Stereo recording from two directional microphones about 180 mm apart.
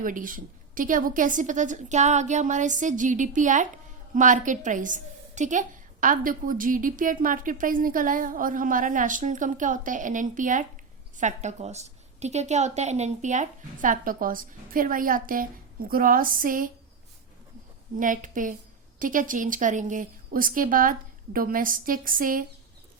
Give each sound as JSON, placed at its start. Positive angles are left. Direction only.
{"t": 0.0, "sound": "a woman's voice", "side_deg": -50}
{"t": 17.9, "sound": "a woman's voice", "side_deg": -45}